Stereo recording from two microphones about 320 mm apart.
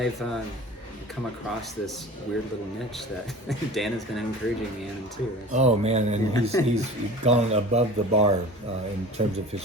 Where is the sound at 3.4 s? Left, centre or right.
Centre.